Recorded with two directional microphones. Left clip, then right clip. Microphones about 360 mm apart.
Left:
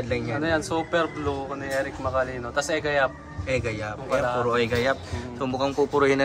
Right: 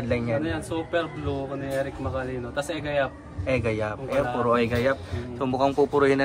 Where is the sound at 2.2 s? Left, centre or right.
Centre.